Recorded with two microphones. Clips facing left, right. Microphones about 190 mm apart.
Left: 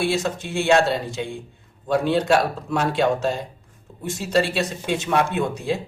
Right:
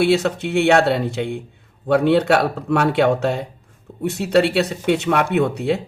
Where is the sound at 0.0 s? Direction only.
65° right (ahead or behind).